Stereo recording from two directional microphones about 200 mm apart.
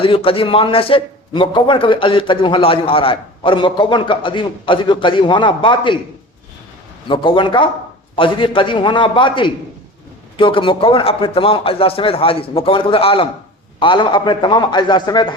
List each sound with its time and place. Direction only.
0.0 s a man's voice: 25° left (ahead or behind)
7.1 s a man's voice: 25° left (ahead or behind)